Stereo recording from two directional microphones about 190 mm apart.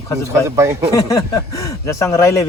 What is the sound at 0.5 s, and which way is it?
Speech, 15° right (ahead or behind).